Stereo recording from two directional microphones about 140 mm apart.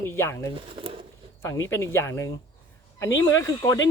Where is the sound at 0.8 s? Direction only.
40° right (ahead or behind).